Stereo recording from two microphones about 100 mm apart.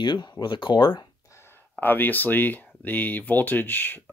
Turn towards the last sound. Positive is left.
turn(degrees=20)  # may be behind; listen again after turning